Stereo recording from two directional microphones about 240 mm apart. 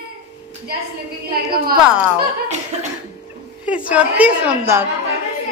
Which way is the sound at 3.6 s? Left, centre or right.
Centre.